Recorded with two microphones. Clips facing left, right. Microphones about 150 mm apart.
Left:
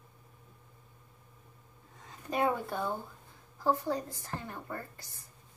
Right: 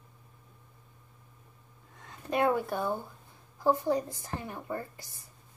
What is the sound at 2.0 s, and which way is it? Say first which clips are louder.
A woman's voice: right 3 dB; 5° left (ahead or behind).